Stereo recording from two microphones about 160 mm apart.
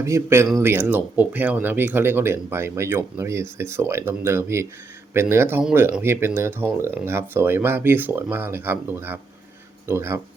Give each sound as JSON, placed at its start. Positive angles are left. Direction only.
{"t": 0.0, "sound": "speech", "side_deg": -20}